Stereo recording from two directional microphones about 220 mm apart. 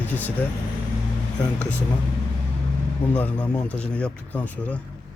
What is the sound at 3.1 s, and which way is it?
Speech, 5° left (ahead or behind).